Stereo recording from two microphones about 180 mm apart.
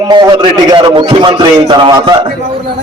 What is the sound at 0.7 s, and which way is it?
A man's voice, 25° right (ahead or behind).